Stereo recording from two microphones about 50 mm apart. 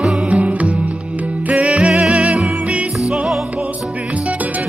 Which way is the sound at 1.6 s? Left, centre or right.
Centre.